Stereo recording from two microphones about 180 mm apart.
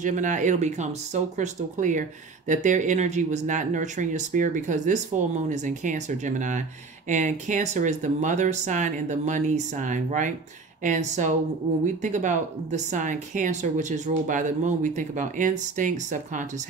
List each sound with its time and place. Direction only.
0.0 s speech: 45° right (ahead or behind)